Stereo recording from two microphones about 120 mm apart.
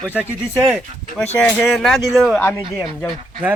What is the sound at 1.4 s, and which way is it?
Speech, 10° left (ahead or behind).